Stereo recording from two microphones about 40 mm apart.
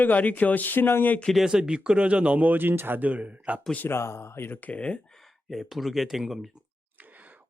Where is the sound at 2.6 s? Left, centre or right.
Right.